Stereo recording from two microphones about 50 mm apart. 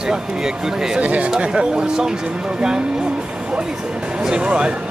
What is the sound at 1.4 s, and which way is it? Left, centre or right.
Speech, centre.